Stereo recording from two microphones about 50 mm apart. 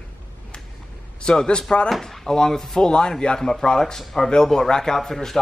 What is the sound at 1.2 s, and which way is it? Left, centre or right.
Speech, centre.